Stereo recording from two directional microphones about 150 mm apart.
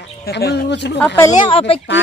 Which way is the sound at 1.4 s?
35° left (ahead or behind).